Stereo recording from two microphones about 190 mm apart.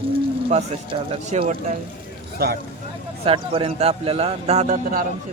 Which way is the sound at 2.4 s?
55° right (ahead or behind).